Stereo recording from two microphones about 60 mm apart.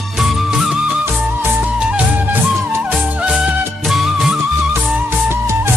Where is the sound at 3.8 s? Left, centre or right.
Centre.